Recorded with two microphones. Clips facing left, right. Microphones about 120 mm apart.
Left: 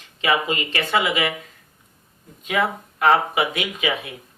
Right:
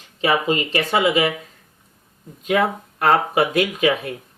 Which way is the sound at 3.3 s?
40° right (ahead or behind).